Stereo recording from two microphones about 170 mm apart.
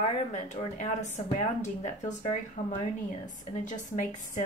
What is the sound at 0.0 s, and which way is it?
A woman's voice, 45° left (ahead or behind).